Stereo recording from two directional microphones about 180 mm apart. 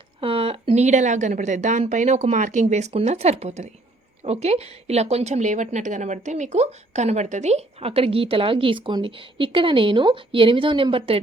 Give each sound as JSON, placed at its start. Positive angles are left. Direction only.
{"t": 0.2, "sound": "a woman's voice", "side_deg": -30}